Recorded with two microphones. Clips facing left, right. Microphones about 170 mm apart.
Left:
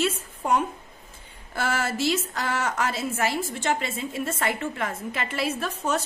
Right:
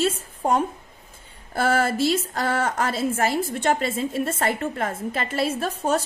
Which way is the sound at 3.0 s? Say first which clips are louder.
Right 4 dB; 50° right (ahead or behind).